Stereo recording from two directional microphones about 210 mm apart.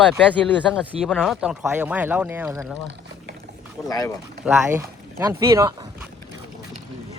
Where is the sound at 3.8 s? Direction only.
15° left (ahead or behind).